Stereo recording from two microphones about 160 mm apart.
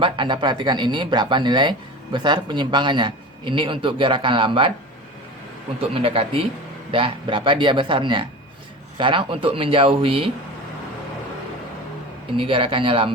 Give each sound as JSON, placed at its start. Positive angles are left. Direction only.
{"t": 0.0, "sound": "a man's voice", "side_deg": -30}
{"t": 5.9, "sound": "a man's voice", "side_deg": -35}
{"t": 12.4, "sound": "a man's voice", "side_deg": -35}